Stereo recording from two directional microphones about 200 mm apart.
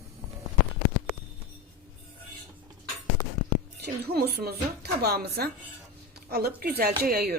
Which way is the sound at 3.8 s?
55° right (ahead or behind).